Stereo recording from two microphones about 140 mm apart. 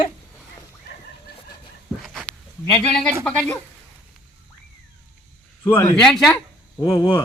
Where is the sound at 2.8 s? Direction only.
10° left (ahead or behind).